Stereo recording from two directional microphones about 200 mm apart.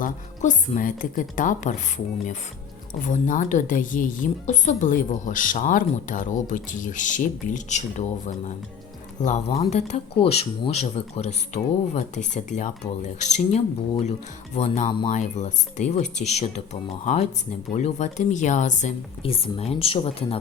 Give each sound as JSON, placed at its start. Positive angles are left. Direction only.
{"t": 0.0, "sound": "a woman's voice", "side_deg": 45}
{"t": 3.1, "sound": "a woman's voice", "side_deg": 40}
{"t": 17.7, "sound": "a woman's voice", "side_deg": 35}